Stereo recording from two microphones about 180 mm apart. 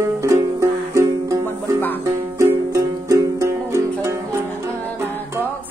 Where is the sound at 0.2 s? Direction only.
15° right (ahead or behind).